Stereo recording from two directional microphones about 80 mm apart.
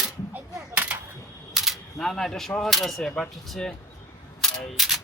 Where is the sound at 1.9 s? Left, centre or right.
Centre.